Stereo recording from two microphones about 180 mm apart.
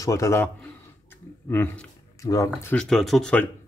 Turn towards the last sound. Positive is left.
turn(degrees=0)  # may be behind; listen again after turning